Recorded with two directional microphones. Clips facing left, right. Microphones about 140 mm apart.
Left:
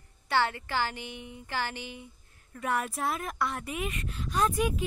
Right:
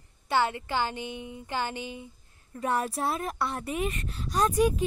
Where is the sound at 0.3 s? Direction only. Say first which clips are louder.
Right 2 dB; 20° right (ahead or behind).